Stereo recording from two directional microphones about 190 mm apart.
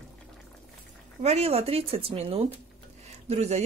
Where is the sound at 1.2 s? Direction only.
35° right (ahead or behind).